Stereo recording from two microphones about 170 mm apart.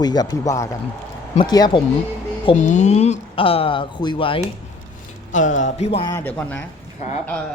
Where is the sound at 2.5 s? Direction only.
45° left (ahead or behind).